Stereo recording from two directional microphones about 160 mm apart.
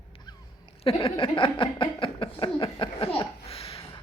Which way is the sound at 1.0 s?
30° left (ahead or behind).